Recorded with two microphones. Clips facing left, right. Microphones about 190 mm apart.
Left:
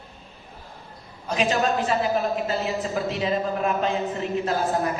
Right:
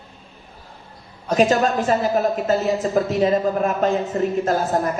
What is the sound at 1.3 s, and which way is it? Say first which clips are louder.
A woman's voice: right 5 dB; 45° right (ahead or behind).